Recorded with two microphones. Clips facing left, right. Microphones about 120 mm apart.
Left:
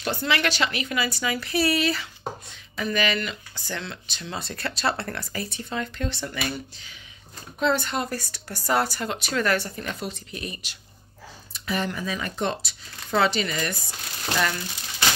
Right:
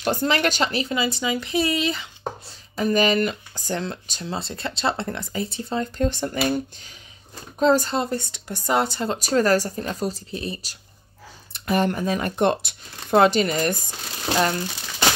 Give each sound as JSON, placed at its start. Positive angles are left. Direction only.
{"t": 0.0, "sound": "speech", "side_deg": -40}
{"t": 2.4, "sound": "speech", "side_deg": -40}
{"t": 9.2, "sound": "speech", "side_deg": -35}
{"t": 11.5, "sound": "speech", "side_deg": -50}